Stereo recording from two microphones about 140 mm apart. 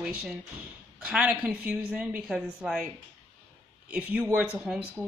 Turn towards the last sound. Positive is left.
turn(degrees=-10)  # may be behind; listen again after turning